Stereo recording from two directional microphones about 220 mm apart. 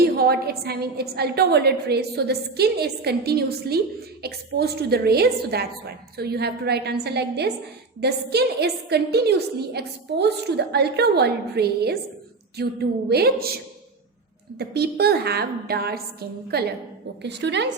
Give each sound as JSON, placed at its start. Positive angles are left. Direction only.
{"t": 0.0, "sound": "a woman's voice", "side_deg": -45}
{"t": 14.6, "sound": "a woman's voice", "side_deg": -45}